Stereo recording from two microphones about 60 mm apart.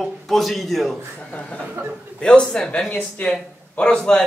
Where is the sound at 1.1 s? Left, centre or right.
Centre.